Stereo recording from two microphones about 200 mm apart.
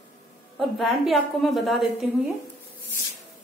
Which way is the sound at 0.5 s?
Centre (ahead or behind).